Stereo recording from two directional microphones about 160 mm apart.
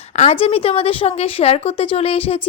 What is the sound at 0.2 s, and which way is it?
A woman's voice, 40° left (ahead or behind).